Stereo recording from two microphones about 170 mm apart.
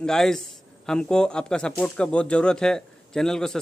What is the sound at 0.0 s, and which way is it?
Speech, 5° left (ahead or behind).